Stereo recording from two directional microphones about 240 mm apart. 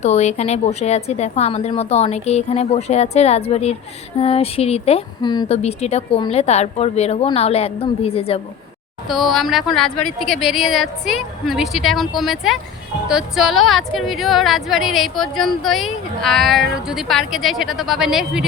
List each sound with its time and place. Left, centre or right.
0.0 s speech: left
9.0 s a woman's voice: centre